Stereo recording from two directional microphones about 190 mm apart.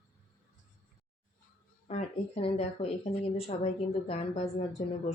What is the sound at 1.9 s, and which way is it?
Speech, 30° left (ahead or behind).